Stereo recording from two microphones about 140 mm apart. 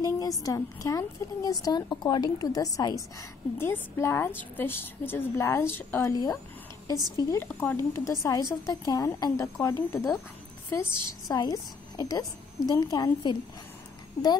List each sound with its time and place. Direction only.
0.0 s a woman's voice: 25° left (ahead or behind)